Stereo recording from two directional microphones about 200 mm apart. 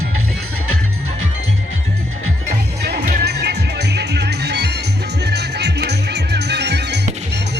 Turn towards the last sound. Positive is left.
turn(degrees=-55)  # may be behind; listen again after turning